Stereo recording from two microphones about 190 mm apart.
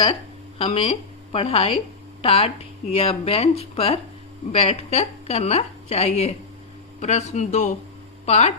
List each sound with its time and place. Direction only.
0.6 s a woman's voice: 30° left (ahead or behind)